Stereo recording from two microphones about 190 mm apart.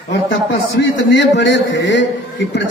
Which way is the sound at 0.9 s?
70° left (ahead or behind).